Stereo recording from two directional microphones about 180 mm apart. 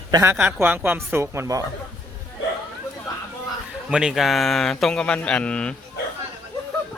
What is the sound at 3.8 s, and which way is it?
Speech, 5° right (ahead or behind).